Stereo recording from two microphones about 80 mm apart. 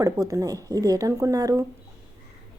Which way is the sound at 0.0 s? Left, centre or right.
Right.